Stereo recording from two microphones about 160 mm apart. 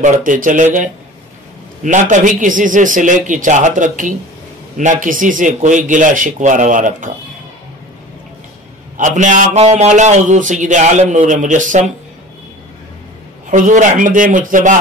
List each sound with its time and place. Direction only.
0.0 s a man's voice: 55° right (ahead or behind)
1.9 s a man's voice: 50° right (ahead or behind)
8.9 s a man's voice: 50° right (ahead or behind)
13.5 s a man's voice: 50° right (ahead or behind)